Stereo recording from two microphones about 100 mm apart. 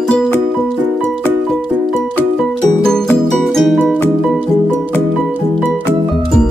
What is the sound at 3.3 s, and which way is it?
Music, centre (ahead or behind).